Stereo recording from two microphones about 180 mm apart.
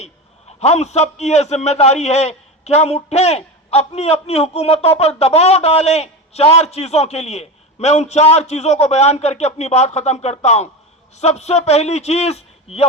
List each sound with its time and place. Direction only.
0.6 s a man's voice: 35° left (ahead or behind)